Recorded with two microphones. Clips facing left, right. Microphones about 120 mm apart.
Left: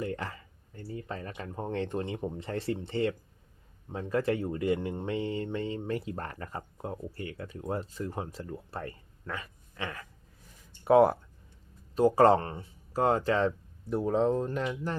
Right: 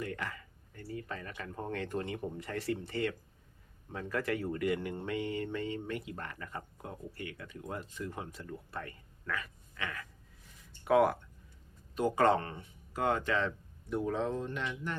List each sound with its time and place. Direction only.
0.0 s speech: 30° left (ahead or behind)